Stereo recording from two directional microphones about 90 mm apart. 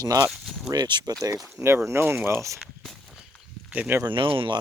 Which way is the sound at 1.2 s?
35° right (ahead or behind).